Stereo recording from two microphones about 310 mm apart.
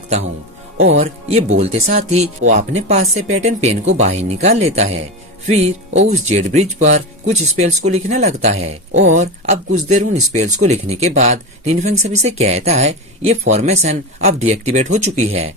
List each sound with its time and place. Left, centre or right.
0.9 s speech: right